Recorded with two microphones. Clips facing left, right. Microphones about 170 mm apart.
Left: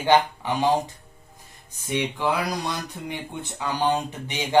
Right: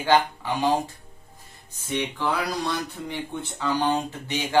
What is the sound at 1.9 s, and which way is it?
Speech, 10° left (ahead or behind).